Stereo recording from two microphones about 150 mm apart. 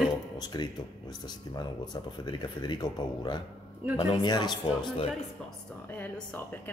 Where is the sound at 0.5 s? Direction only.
25° left (ahead or behind).